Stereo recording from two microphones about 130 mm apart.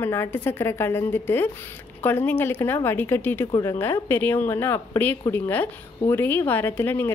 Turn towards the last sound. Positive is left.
turn(degrees=15)  # may be behind; listen again after turning